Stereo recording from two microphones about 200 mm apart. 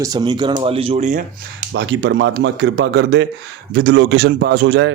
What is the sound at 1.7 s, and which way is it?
Speech, 60° right (ahead or behind).